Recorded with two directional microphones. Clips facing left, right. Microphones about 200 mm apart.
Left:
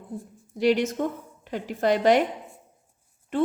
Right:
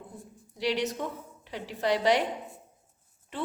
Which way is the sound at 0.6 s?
50° left (ahead or behind).